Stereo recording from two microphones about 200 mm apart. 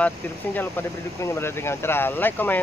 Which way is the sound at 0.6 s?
10° left (ahead or behind).